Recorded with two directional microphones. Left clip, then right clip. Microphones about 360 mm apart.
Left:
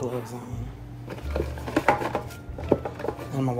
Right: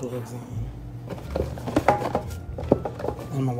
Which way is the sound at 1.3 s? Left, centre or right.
Right.